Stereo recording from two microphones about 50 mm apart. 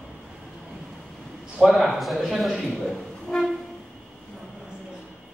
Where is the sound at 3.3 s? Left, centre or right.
Centre.